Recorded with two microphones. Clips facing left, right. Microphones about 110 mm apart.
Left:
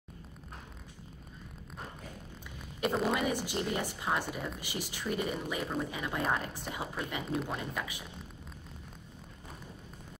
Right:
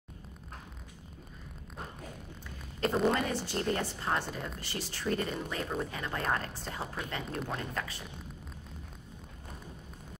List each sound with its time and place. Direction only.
2.8 s speech: 5° left (ahead or behind)